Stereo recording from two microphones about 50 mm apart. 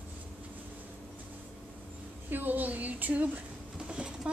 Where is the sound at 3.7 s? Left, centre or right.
Centre.